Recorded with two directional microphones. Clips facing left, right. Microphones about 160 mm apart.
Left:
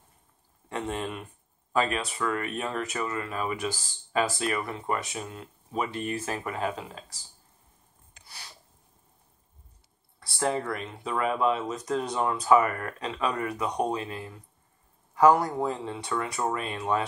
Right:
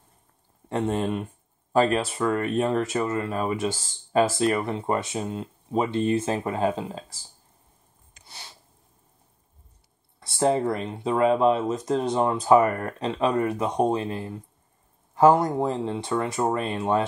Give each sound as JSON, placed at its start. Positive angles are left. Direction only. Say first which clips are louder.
{"t": 0.7, "sound": "speech", "louder": "right 7 dB", "side_deg": -30}
{"t": 8.1, "sound": "a sound", "louder": "right 2 dB", "side_deg": -25}
{"t": 10.2, "sound": "speech", "louder": "right 6 dB", "side_deg": -25}